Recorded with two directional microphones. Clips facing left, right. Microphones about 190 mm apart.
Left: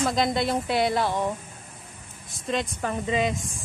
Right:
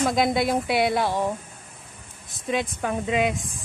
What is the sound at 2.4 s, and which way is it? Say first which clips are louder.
Speech: right 2 dB; centre (ahead or behind).